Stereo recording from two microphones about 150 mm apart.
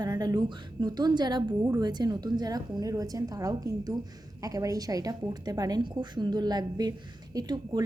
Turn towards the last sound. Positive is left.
turn(degrees=-25)  # may be behind; listen again after turning